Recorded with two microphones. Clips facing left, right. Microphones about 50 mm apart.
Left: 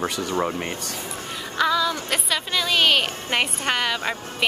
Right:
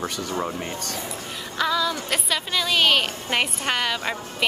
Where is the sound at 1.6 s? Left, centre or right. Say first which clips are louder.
Left 2 dB; centre.